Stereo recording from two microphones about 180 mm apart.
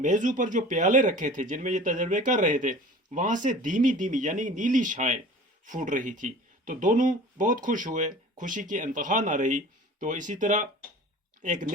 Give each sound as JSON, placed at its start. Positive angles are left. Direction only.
{"t": 0.0, "sound": "speech", "side_deg": -45}